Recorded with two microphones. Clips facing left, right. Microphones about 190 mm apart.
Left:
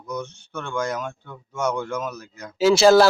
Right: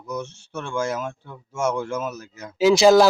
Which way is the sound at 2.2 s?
5° right (ahead or behind).